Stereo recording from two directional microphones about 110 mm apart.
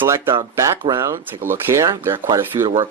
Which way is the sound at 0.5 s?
25° right (ahead or behind).